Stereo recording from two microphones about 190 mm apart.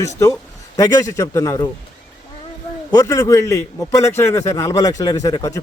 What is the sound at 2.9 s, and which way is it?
A man's voice, 15° left (ahead or behind).